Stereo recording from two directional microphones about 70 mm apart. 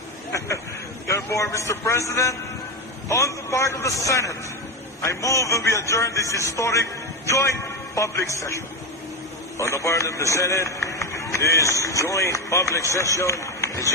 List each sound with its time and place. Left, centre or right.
0.3 s a man's voice: left